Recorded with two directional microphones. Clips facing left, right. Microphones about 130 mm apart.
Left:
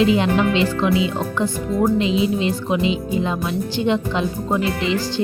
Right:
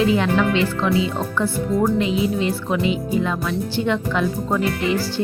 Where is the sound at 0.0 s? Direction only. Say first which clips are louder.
Left 1 dB; 20° left (ahead or behind).